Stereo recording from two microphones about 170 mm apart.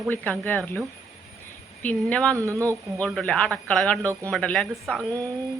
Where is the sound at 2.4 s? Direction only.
20° right (ahead or behind).